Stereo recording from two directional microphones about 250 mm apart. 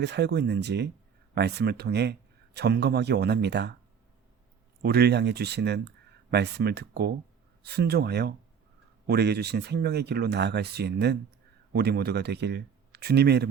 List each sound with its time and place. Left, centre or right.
0.0 s speech: right
4.8 s speech: right